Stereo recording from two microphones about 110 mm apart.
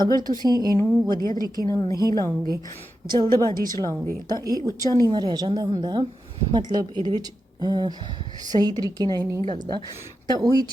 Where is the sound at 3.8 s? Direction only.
35° right (ahead or behind).